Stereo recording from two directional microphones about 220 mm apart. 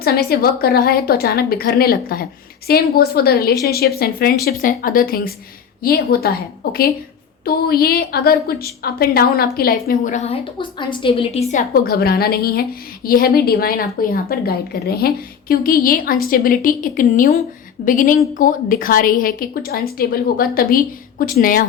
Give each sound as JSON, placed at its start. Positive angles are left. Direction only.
{"t": 0.0, "sound": "a woman's voice", "side_deg": 45}